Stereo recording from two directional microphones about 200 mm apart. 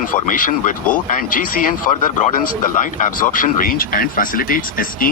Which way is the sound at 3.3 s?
45° left (ahead or behind).